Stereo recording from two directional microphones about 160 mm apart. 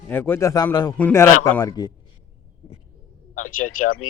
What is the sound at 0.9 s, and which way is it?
Speech, 10° left (ahead or behind).